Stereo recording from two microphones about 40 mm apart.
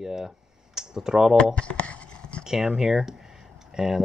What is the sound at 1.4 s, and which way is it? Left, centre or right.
Writing, left.